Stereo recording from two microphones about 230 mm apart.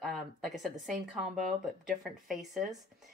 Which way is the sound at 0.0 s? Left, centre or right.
Centre.